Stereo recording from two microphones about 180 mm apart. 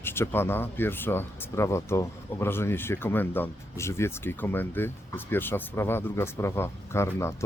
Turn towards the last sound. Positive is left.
turn(degrees=15)  # may be behind; listen again after turning